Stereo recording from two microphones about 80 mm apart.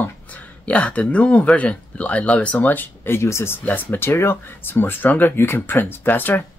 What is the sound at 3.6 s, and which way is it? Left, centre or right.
Speech, left.